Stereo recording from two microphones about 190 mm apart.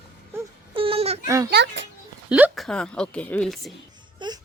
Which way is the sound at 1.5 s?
65° right (ahead or behind).